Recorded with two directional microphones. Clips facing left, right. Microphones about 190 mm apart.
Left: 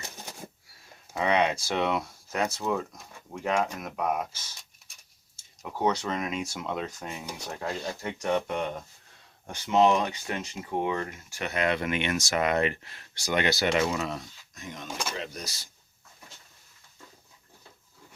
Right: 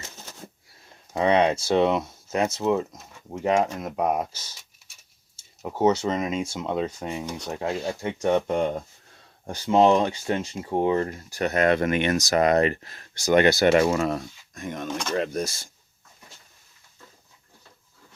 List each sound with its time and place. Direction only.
0.0 s a sound: 15° left (ahead or behind)
1.1 s speech: 30° right (ahead or behind)
5.6 s speech: 25° right (ahead or behind); by 15.7 s 50° right (ahead or behind)